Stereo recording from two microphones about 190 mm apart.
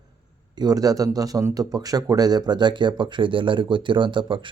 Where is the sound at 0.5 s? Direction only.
20° right (ahead or behind).